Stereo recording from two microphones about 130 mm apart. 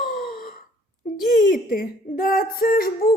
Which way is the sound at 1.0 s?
90° left.